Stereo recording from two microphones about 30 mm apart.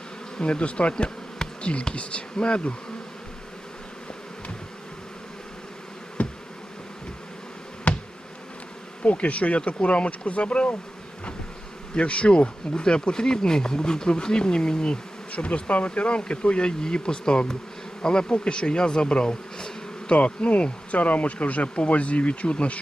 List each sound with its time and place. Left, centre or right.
0.3 s speech: left
6.2 s bee: left
7.9 s insect: left
9.0 s speech: left
11.9 s speech: left
15.3 s speech: left
20.1 s speech: left
21.0 s speech: left